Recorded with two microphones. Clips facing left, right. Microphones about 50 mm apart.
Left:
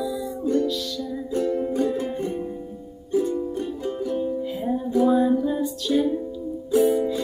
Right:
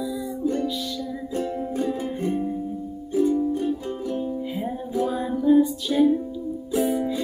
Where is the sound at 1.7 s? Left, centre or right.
Centre.